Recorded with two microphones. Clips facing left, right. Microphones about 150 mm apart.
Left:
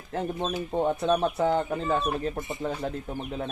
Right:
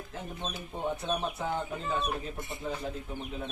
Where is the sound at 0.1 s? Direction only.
65° left (ahead or behind).